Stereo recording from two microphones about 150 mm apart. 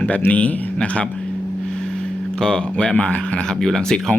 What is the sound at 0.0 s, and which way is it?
Speech, 10° left (ahead or behind).